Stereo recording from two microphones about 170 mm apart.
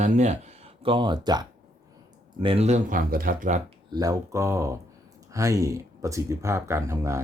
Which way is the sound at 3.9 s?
20° right (ahead or behind).